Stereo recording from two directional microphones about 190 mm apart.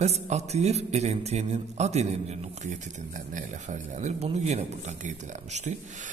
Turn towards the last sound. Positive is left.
turn(degrees=-40)  # may be behind; listen again after turning